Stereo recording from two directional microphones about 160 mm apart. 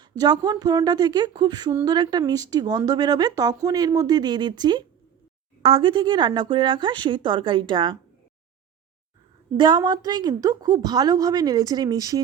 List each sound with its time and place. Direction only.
0.0 s speech: 25° right (ahead or behind)
9.6 s speech: 30° right (ahead or behind)